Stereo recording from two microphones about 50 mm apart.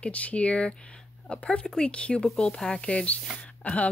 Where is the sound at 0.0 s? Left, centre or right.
Left.